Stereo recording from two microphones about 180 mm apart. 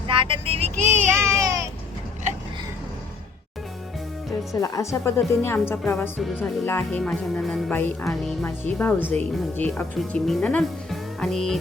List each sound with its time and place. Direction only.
0.1 s speech: 30° right (ahead or behind)
4.6 s a woman's voice: 20° left (ahead or behind)
6.1 s speech: centre (ahead or behind)
6.4 s speech: 10° left (ahead or behind)